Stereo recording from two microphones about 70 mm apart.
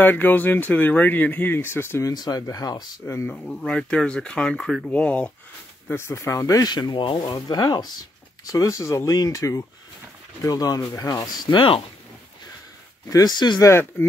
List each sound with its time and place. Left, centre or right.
0.0 s speech: left
2.0 s speech: left
3.0 s speech: left
3.4 s speech: centre
5.9 s speech: left
8.5 s speech: left
10.5 s speech: left
13.1 s speech: left